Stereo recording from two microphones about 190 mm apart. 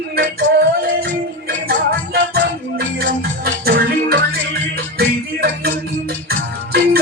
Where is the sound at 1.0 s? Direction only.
55° right (ahead or behind).